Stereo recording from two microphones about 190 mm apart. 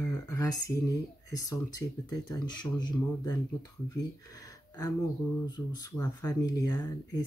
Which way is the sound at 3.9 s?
20° left (ahead or behind).